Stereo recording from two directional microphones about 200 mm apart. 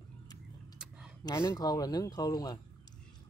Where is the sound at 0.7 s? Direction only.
5° right (ahead or behind).